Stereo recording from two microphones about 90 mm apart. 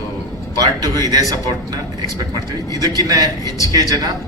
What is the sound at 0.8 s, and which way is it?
Speech, 45° right (ahead or behind).